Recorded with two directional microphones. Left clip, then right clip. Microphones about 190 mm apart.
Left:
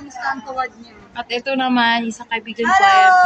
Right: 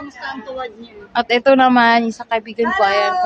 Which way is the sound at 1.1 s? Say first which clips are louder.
Right 9 dB; 40° right (ahead or behind).